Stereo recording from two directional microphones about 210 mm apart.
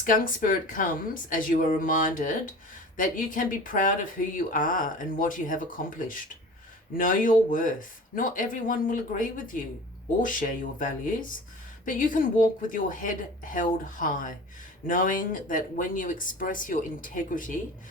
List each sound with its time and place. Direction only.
0.0 s speech: 40° left (ahead or behind)